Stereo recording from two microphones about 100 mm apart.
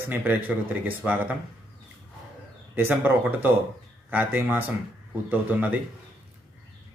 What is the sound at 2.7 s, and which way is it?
Speech, 20° right (ahead or behind).